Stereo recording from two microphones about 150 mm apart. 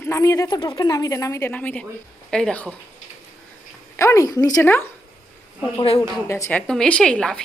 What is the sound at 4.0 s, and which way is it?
Speech, 20° left (ahead or behind).